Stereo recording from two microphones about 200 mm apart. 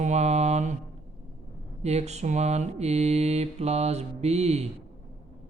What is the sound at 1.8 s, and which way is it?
Mantra, 35° right (ahead or behind).